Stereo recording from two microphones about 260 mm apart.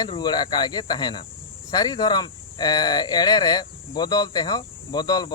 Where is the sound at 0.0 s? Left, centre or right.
Centre.